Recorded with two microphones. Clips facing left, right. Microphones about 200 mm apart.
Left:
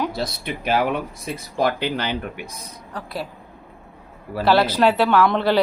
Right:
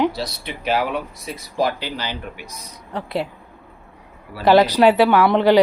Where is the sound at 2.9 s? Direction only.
25° right (ahead or behind).